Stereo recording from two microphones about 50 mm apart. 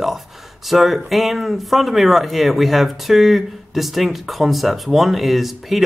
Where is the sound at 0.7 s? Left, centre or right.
Centre.